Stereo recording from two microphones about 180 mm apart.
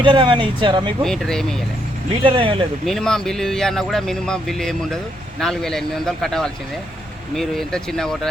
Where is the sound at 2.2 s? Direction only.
30° right (ahead or behind).